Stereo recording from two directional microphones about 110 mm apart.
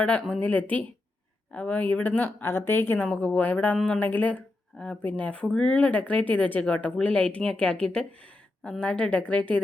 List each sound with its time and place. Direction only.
0.0 s speech: 10° left (ahead or behind)